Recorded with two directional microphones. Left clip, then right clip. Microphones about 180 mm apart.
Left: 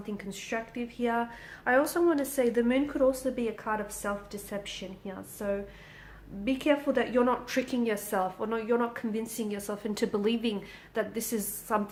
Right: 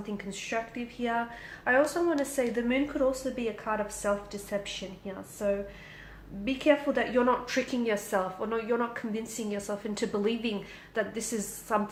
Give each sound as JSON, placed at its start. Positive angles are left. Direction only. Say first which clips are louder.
{"t": 0.2, "sound": "a woman's voice", "louder": "right 2 dB", "side_deg": 35}